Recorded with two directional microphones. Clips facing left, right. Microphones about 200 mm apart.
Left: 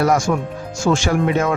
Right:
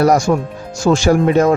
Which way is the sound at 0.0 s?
35° right (ahead or behind).